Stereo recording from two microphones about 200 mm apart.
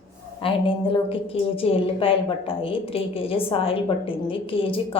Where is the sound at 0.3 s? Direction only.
25° left (ahead or behind).